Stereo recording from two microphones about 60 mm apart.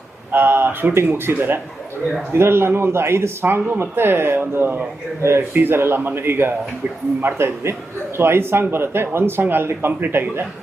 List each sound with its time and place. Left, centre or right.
0.3 s a man's voice: right